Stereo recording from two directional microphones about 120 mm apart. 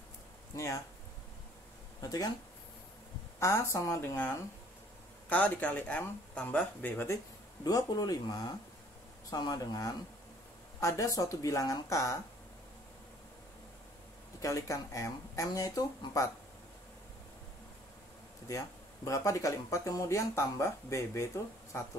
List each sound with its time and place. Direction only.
2.0 s speech: 30° left (ahead or behind)
3.3 s speech: 25° left (ahead or behind)
7.6 s speech: 35° left (ahead or behind)
14.4 s speech: 25° left (ahead or behind)
19.0 s speech: 25° left (ahead or behind)